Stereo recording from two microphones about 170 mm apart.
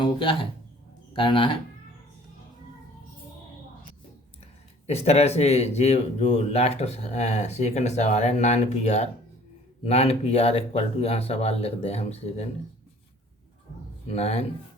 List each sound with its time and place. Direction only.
0.0 s speech: 30° left (ahead or behind)
4.9 s speech: 40° left (ahead or behind)
14.1 s speech: 40° left (ahead or behind)